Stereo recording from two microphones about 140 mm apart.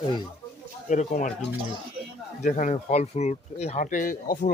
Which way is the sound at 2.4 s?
60° left (ahead or behind).